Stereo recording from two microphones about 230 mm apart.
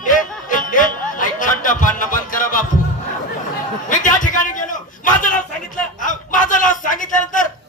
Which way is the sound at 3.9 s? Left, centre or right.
Left.